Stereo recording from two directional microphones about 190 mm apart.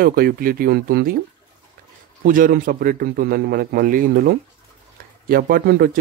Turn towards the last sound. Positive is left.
turn(degrees=-55)  # may be behind; listen again after turning